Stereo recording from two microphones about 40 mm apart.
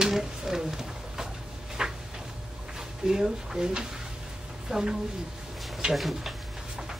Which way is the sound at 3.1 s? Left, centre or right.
Centre.